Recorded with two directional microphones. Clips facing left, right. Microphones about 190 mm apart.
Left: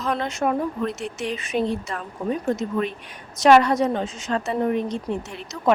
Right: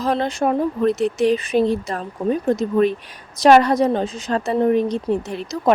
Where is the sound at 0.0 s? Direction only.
35° right (ahead or behind).